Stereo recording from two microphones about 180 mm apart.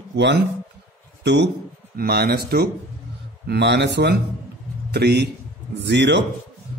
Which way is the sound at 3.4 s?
70° right (ahead or behind).